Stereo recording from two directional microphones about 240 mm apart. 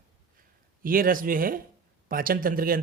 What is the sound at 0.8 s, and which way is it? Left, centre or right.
A man's voice, right.